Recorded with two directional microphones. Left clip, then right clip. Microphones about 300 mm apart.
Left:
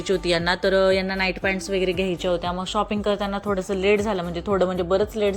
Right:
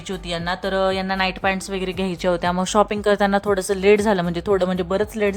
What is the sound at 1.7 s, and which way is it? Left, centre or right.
Speech, right.